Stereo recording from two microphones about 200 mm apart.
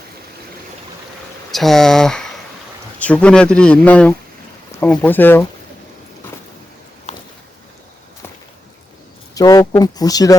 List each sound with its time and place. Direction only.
1.5 s speech: centre (ahead or behind)
7.1 s a sound: 35° left (ahead or behind)
9.3 s speech: 20° left (ahead or behind)